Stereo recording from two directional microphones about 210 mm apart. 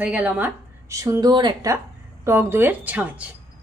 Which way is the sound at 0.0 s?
5° right (ahead or behind).